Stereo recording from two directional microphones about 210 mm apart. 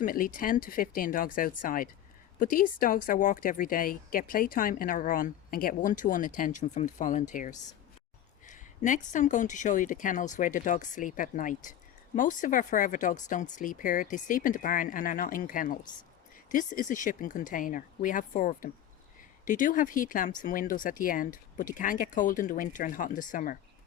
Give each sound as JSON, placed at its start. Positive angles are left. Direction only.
{"t": 0.0, "sound": "speech", "side_deg": 40}